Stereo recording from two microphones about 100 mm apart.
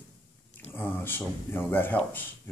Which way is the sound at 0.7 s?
20° left (ahead or behind).